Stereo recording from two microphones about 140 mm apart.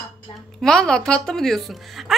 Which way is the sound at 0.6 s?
5° left (ahead or behind).